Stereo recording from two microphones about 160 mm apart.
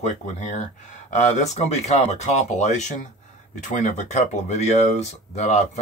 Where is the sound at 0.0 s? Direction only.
50° left (ahead or behind).